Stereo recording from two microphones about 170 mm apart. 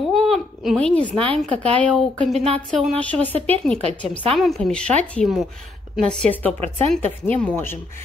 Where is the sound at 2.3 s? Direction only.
35° right (ahead or behind).